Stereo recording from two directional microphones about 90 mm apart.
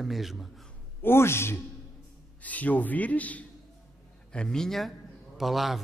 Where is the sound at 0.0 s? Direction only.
Centre (ahead or behind).